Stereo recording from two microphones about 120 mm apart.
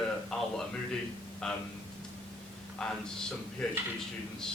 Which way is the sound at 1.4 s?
5° left (ahead or behind).